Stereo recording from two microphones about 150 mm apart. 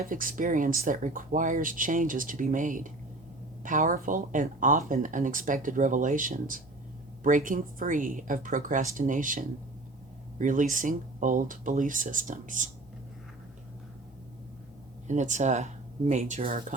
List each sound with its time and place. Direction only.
0.0 s speech: 65° right (ahead or behind)
15.0 s speech: 55° right (ahead or behind)